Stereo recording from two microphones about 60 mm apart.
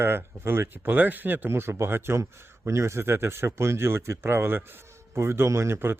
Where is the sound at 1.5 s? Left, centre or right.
Right.